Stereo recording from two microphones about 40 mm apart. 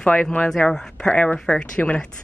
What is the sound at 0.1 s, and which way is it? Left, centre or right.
Speech, left.